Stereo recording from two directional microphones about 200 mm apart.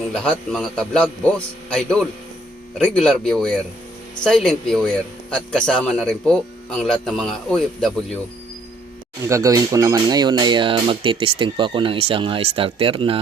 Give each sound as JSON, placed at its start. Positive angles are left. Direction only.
{"t": 0.3, "sound": "a man's voice", "side_deg": 5}
{"t": 9.2, "sound": "speech", "side_deg": -15}